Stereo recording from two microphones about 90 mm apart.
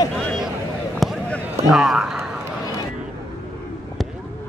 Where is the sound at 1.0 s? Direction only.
Centre (ahead or behind).